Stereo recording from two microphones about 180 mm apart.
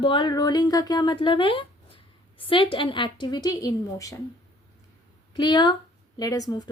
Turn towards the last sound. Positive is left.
turn(degrees=20)  # may be behind; listen again after turning